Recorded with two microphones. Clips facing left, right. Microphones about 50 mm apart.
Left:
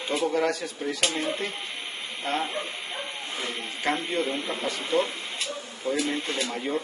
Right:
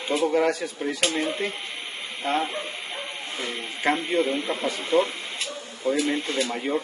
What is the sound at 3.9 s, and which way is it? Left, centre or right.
Speech, centre.